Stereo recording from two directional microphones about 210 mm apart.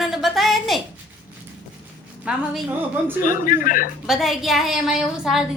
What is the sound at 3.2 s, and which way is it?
Speech, 40° left (ahead or behind).